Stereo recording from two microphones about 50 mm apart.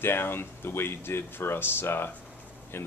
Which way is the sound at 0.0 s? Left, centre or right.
Left.